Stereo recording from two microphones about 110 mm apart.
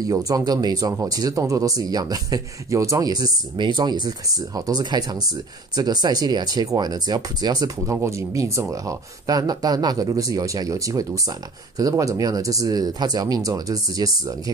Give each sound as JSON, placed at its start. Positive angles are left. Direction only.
{"t": 0.0, "sound": "speech", "side_deg": -35}
{"t": 7.8, "sound": "speech", "side_deg": -25}